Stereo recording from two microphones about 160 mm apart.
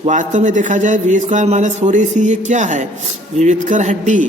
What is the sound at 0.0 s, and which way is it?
A man's voice, 50° right (ahead or behind).